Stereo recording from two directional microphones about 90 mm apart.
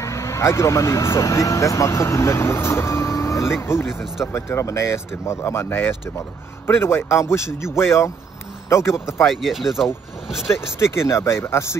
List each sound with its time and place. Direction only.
0.0 s speech: 35° left (ahead or behind)
9.2 s speech: centre (ahead or behind)
10.5 s speech: 30° left (ahead or behind)